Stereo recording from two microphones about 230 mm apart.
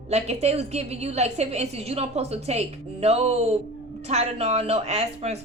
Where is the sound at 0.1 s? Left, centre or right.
Right.